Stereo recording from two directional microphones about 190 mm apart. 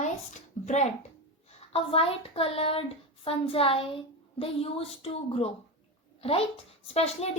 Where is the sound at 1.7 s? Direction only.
30° left (ahead or behind).